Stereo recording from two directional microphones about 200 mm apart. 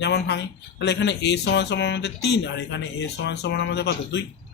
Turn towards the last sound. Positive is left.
turn(degrees=55)  # may be behind; listen again after turning